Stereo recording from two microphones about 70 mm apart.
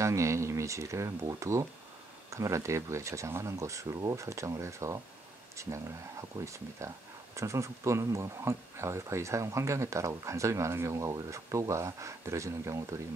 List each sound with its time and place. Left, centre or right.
0.0 s speech: right
6.8 s speech: right